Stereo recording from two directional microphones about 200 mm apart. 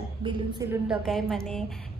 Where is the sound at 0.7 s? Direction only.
Centre (ahead or behind).